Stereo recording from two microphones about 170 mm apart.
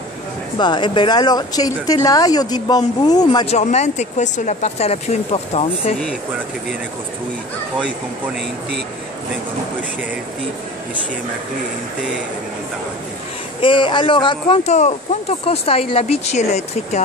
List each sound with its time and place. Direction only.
0.6 s speech: 25° left (ahead or behind)
3.4 s speech: 40° left (ahead or behind)
13.6 s speech: 30° left (ahead or behind)
14.6 s speech: 40° left (ahead or behind)